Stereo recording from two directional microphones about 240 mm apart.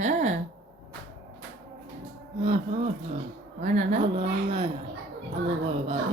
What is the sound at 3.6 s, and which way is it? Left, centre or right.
Speech, right.